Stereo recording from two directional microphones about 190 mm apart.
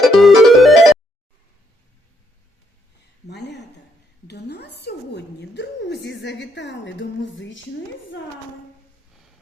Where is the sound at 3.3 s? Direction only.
65° left (ahead or behind).